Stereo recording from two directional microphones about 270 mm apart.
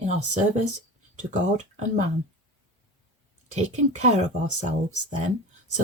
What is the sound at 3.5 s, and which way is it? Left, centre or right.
Speech, right.